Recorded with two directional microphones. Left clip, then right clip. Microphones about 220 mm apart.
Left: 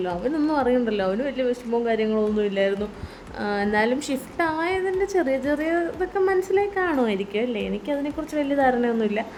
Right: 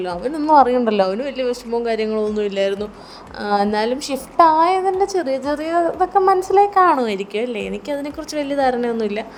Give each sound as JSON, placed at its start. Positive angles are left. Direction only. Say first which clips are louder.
{"t": 0.0, "sound": "a woman's voice", "louder": "right 2 dB", "side_deg": -20}